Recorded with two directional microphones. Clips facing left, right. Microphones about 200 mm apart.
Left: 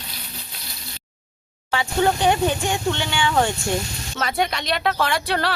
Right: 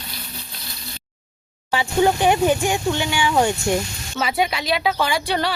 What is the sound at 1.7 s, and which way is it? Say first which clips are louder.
Speech: right 2 dB; 15° right (ahead or behind).